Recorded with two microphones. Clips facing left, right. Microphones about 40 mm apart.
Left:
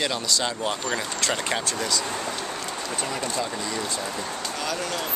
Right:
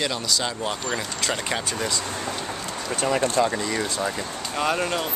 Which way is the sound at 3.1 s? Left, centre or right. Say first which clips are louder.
Right 10 dB; right.